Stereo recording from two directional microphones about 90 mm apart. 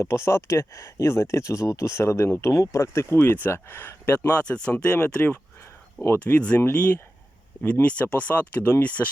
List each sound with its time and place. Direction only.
0.0 s speech: 30° left (ahead or behind)